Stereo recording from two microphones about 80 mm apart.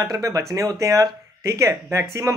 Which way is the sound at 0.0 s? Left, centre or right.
Right.